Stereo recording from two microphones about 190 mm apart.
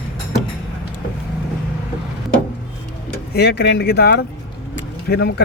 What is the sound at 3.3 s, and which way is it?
Speech, 60° left (ahead or behind).